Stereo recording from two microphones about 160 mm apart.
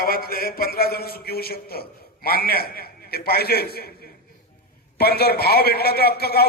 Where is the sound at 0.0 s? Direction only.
70° left (ahead or behind).